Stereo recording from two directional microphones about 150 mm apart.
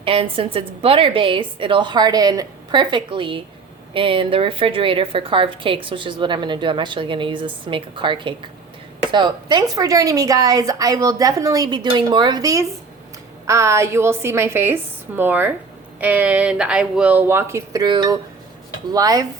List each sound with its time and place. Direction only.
0.0 s a woman's voice: 35° right (ahead or behind)